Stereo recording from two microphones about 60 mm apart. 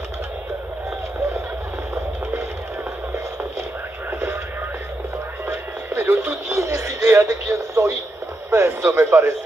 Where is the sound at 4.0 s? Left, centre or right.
Right.